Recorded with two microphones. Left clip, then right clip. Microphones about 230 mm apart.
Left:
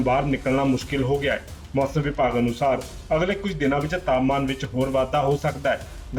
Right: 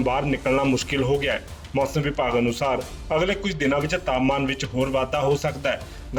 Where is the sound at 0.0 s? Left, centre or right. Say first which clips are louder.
Left 1 dB; right.